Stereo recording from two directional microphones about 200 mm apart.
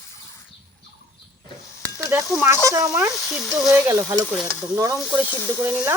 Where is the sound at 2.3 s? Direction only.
10° right (ahead or behind).